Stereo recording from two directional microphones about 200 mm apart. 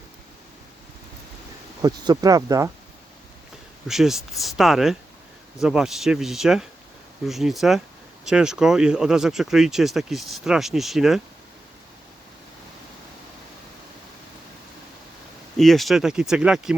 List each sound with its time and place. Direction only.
1.8 s speech: 20° right (ahead or behind)
3.8 s speech: centre (ahead or behind)
15.5 s speech: centre (ahead or behind)